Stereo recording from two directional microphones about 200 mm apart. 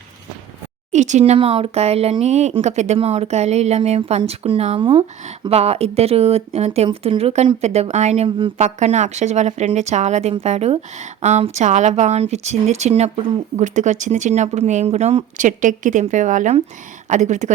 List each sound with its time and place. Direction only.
0.9 s speech: 35° right (ahead or behind)